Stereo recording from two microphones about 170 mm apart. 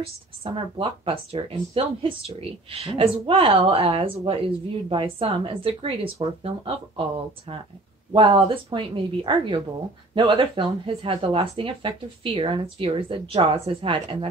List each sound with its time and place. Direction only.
0.4 s speech: 30° right (ahead or behind)